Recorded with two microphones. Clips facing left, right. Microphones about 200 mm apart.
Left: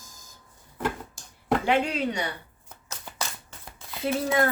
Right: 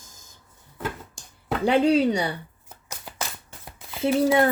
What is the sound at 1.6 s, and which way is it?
Speech, 35° right (ahead or behind).